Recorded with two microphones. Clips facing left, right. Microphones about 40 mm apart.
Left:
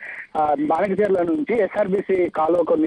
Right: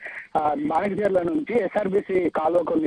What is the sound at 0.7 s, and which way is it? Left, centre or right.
Speech, left.